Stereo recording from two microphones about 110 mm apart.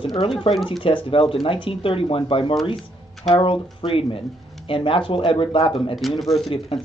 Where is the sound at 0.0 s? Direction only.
55° left (ahead or behind).